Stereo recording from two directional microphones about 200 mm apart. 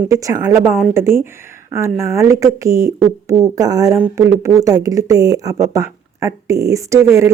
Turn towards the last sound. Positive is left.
turn(degrees=-15)  # may be behind; listen again after turning